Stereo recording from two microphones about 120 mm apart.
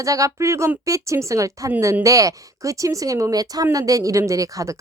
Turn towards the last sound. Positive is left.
turn(degrees=-25)  # may be behind; listen again after turning